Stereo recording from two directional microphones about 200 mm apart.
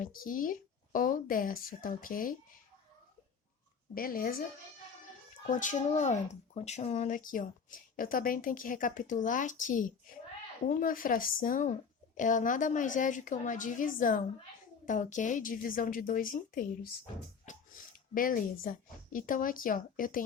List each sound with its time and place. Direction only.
0.0 s speech: 45° left (ahead or behind)
3.9 s a woman's voice: 45° left (ahead or behind)
5.5 s a woman's voice: 40° left (ahead or behind)